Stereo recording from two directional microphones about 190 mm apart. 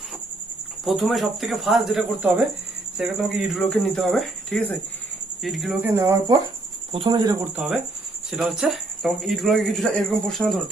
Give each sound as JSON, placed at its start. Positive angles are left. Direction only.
{"t": 0.9, "sound": "speech", "side_deg": 0}
{"t": 5.9, "sound": "speech", "side_deg": -15}
{"t": 7.5, "sound": "speech", "side_deg": 0}